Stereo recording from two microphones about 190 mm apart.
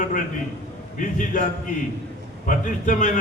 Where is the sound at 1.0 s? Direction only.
45° left (ahead or behind).